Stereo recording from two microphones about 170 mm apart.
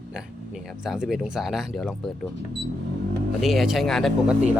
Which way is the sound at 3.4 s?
Centre (ahead or behind).